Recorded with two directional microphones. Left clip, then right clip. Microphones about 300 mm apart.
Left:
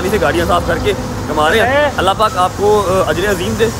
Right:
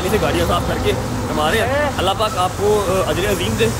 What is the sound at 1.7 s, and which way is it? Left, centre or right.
Speech, left.